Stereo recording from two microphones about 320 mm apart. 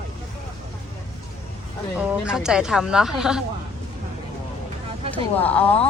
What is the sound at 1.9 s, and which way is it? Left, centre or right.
Speech, centre.